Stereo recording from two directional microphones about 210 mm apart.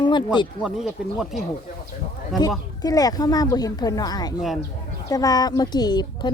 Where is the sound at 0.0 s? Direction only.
20° left (ahead or behind).